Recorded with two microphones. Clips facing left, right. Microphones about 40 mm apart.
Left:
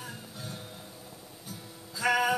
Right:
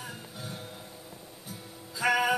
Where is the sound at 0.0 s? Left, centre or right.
Centre.